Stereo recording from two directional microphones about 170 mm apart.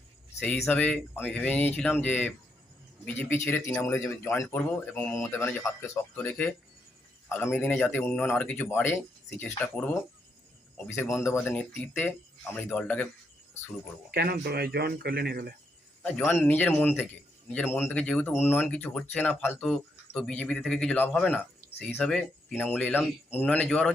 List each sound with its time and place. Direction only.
0.3 s speech: 5° left (ahead or behind)
14.1 s speech: 65° right (ahead or behind)
16.0 s speech: 10° left (ahead or behind)